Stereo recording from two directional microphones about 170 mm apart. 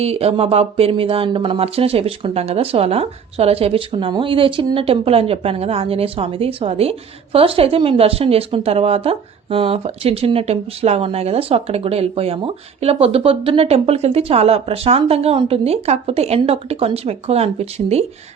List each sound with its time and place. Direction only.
0.0 s speech: 35° right (ahead or behind)